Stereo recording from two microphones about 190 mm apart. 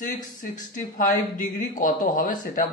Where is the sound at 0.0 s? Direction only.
45° left (ahead or behind).